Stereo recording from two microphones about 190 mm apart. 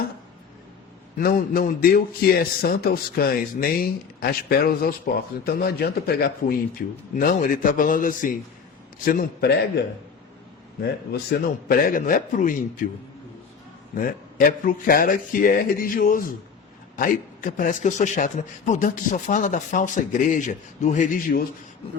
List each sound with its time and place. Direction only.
1.2 s a man's voice: 50° left (ahead or behind)
11.3 s a man's voice: 50° left (ahead or behind)
13.9 s a man's voice: 45° left (ahead or behind)